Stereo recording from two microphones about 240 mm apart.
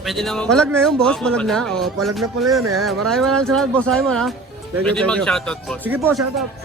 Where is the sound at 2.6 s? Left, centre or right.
Right.